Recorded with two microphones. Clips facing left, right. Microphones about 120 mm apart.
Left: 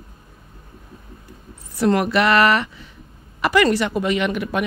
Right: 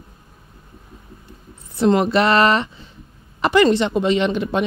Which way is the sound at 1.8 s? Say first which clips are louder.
Right 2 dB; 25° right (ahead or behind).